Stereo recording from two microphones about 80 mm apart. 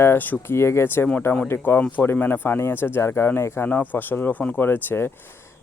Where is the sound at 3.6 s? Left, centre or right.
Left.